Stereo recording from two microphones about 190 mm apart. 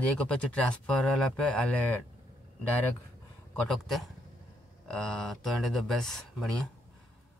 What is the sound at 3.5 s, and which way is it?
Speech, centre (ahead or behind).